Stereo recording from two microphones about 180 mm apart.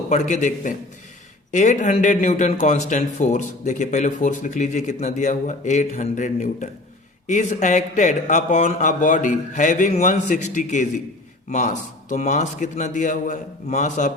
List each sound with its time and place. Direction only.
0.1 s speech: 40° left (ahead or behind)